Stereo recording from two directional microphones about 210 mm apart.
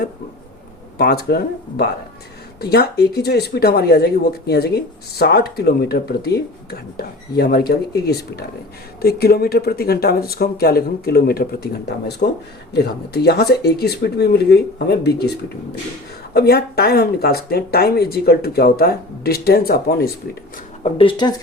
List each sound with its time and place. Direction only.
0.9 s speech: 50° left (ahead or behind)
20.8 s speech: 25° left (ahead or behind)